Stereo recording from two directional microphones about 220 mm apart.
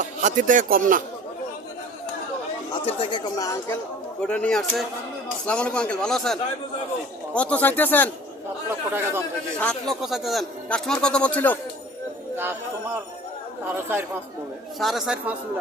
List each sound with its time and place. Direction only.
0.0 s speech: 35° right (ahead or behind)
2.8 s a man's voice: 25° left (ahead or behind)
8.9 s speech: 10° right (ahead or behind)
9.6 s a man's voice: 5° left (ahead or behind)
14.8 s a man's voice: centre (ahead or behind)